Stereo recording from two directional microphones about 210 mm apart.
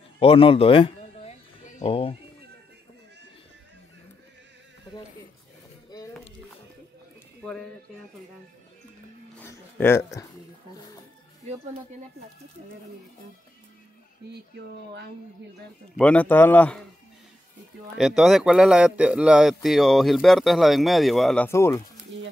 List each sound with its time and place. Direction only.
0.2 s speech: 25° left (ahead or behind)
9.4 s a sound: 10° left (ahead or behind)
16.0 s a man's voice: 5° left (ahead or behind)
17.9 s a man's voice: centre (ahead or behind)
21.5 s a man's voice: 10° left (ahead or behind)